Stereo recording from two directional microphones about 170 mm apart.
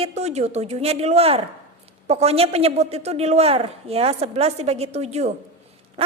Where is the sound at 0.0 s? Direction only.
40° right (ahead or behind).